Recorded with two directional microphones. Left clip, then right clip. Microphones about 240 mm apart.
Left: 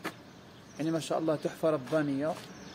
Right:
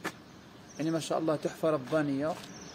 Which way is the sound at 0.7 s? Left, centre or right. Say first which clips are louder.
Even; centre.